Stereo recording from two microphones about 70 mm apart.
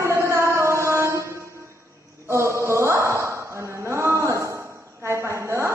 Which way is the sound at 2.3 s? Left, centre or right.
Right.